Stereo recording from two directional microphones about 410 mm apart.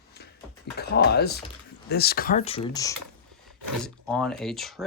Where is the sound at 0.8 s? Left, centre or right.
Left.